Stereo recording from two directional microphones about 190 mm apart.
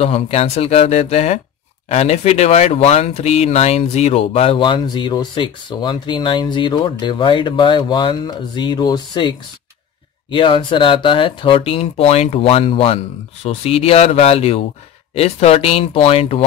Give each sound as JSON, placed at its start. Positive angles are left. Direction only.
{"t": 0.0, "sound": "speech", "side_deg": 35}
{"t": 10.3, "sound": "speech", "side_deg": 25}